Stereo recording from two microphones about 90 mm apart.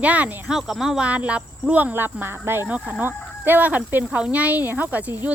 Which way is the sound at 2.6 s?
15° right (ahead or behind).